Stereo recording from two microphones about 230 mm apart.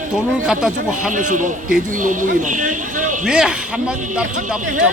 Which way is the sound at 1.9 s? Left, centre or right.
Right.